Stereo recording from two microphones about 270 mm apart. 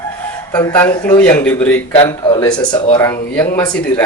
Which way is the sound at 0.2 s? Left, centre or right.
Centre.